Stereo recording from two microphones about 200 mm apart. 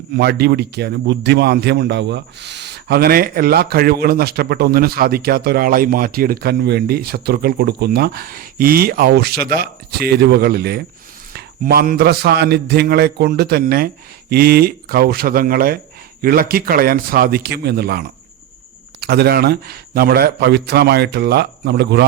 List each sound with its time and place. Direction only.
0.2 s a man's voice: 55° right (ahead or behind)